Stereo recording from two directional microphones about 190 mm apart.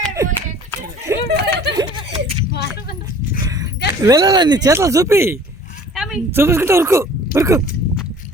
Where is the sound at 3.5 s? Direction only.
20° right (ahead or behind).